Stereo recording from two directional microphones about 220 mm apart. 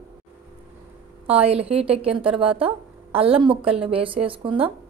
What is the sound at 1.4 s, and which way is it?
A woman's voice, 25° right (ahead or behind).